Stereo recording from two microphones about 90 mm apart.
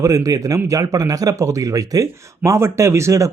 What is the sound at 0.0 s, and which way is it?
A man's voice, 40° right (ahead or behind).